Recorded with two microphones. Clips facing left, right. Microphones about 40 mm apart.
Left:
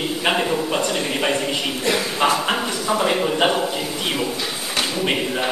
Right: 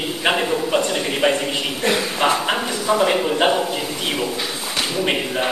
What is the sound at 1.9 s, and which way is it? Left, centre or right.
Speech, right.